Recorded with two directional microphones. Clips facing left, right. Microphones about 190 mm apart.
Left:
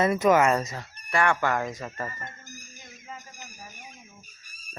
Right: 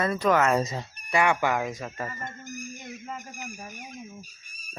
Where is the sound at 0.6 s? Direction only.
25° right (ahead or behind).